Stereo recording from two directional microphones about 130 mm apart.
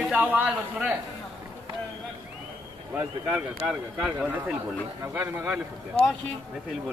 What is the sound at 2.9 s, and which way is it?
Speech, 10° right (ahead or behind).